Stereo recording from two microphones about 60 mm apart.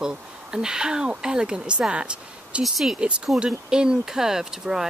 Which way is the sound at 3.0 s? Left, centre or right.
Centre.